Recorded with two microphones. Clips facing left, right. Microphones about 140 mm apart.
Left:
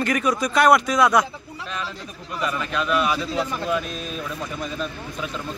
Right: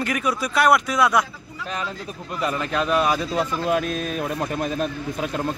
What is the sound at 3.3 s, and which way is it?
Speech, 55° right (ahead or behind).